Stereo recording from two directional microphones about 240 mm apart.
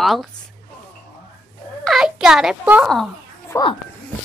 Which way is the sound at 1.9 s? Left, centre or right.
Centre.